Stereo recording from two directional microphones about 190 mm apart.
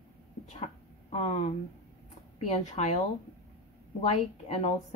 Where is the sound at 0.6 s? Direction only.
30° left (ahead or behind).